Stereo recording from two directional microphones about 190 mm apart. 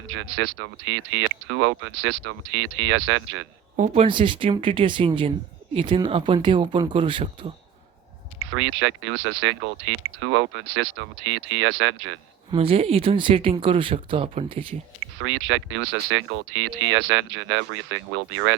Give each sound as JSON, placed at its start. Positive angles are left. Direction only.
{"t": 0.1, "sound": "speech", "side_deg": -80}
{"t": 3.8, "sound": "speech", "side_deg": -35}
{"t": 8.5, "sound": "speech", "side_deg": -90}
{"t": 11.3, "sound": "speech", "side_deg": -90}
{"t": 12.5, "sound": "speech", "side_deg": -30}
{"t": 15.2, "sound": "speech", "side_deg": -90}